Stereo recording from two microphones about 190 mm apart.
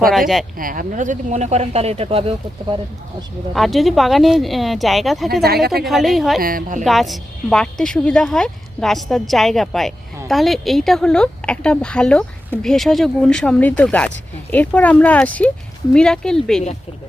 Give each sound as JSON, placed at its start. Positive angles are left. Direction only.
{"t": 0.1, "sound": "speech", "side_deg": 0}
{"t": 0.5, "sound": "speech", "side_deg": -45}
{"t": 3.5, "sound": "speech", "side_deg": 0}
{"t": 5.4, "sound": "speech", "side_deg": -55}
{"t": 5.8, "sound": "speech", "side_deg": 0}
{"t": 6.4, "sound": "a woman's voice", "side_deg": -50}
{"t": 6.8, "sound": "speech", "side_deg": 0}